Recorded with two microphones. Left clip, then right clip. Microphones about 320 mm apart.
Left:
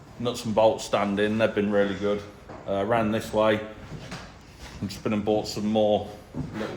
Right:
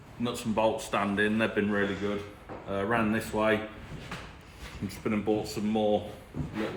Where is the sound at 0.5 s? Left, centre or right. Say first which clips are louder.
Left 6 dB; left.